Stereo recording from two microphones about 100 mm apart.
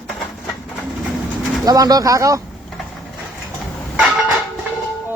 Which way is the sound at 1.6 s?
40° right (ahead or behind).